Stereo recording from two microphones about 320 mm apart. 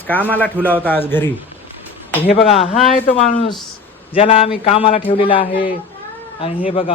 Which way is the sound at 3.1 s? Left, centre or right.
Centre.